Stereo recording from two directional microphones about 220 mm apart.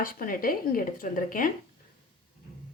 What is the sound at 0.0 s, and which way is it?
Speech, 40° left (ahead or behind).